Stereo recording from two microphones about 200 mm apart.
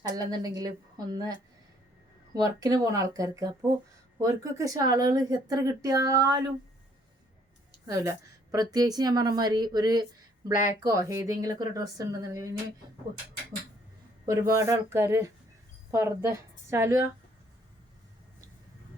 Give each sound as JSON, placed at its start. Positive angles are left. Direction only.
{"t": 0.1, "sound": "a woman's voice", "side_deg": -20}
{"t": 2.3, "sound": "speech", "side_deg": -20}
{"t": 7.9, "sound": "a woman's voice", "side_deg": -15}
{"t": 14.3, "sound": "a woman's voice", "side_deg": -15}